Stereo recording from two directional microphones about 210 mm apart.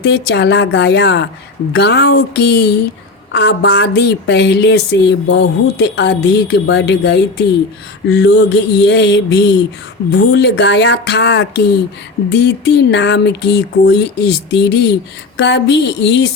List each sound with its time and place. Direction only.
0.0 s speech: 55° left (ahead or behind)